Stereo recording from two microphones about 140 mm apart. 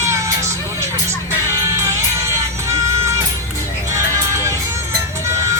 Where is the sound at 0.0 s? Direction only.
20° right (ahead or behind).